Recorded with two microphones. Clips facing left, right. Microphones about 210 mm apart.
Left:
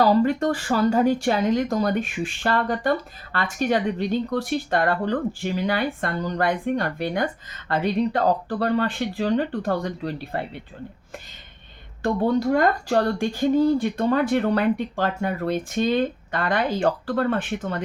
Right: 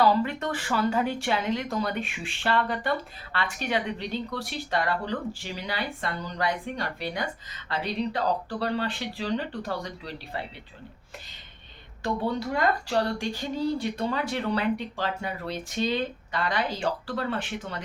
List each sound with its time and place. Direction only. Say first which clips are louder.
0.0 s speech: left 5 dB; 40° left (ahead or behind)
12.0 s speech: left 7 dB; 45° left (ahead or behind)